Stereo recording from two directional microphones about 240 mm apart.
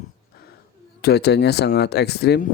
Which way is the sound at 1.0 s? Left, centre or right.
Left.